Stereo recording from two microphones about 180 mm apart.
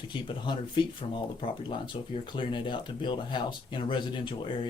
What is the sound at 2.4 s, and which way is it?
Speech, 25° left (ahead or behind).